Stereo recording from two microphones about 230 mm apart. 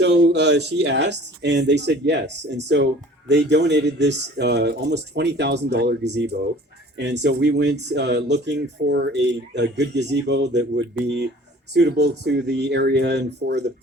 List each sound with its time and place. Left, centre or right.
0.0 s speech: right